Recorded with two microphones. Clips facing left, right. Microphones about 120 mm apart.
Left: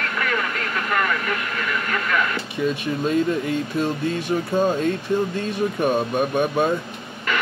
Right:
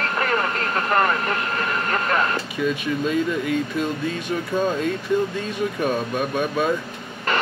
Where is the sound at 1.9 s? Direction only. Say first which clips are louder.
Right 1 dB; 40° right (ahead or behind).